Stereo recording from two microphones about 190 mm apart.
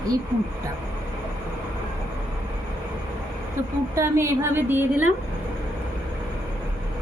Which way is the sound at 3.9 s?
15° right (ahead or behind).